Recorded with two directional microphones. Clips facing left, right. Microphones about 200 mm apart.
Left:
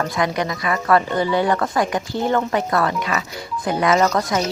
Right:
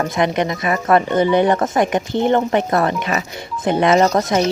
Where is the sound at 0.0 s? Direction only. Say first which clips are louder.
Right 3 dB; 20° right (ahead or behind).